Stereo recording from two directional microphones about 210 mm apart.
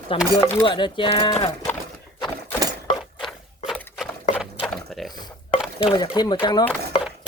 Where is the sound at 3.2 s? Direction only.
Centre (ahead or behind).